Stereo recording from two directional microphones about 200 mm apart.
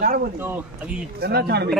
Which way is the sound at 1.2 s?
50° right (ahead or behind).